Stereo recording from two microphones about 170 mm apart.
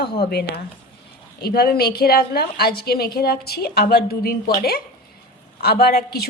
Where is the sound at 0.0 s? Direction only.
70° left (ahead or behind).